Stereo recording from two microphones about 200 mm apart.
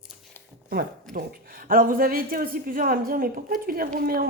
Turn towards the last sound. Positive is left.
turn(degrees=-45)  # may be behind; listen again after turning